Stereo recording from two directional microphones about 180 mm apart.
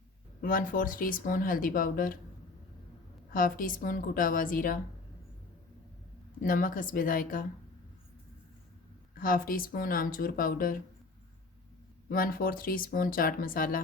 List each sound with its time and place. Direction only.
0.4 s speech: 50° left (ahead or behind)
3.3 s speech: 50° left (ahead or behind)
6.4 s speech: 50° left (ahead or behind)
9.1 s speech: 50° left (ahead or behind)
12.0 s speech: 55° left (ahead or behind)